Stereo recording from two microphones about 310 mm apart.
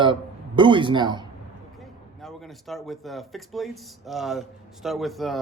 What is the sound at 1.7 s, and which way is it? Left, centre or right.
A man's voice, centre.